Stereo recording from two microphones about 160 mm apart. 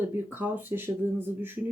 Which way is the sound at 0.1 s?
15° right (ahead or behind).